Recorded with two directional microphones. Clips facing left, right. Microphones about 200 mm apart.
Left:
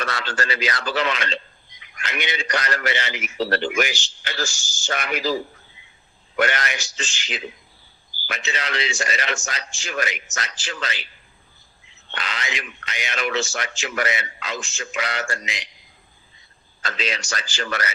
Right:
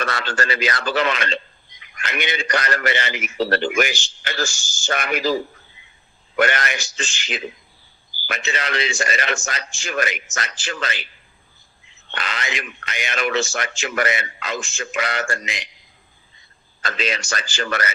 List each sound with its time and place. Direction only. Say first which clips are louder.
0.0 s a man's voice: right 3 dB; 55° right (ahead or behind)
12.1 s a man's voice: right 2 dB; 55° right (ahead or behind)
16.8 s a man's voice: right 3 dB; 55° right (ahead or behind)